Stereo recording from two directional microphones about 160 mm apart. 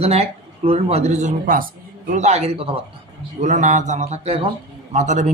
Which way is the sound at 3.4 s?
50° right (ahead or behind).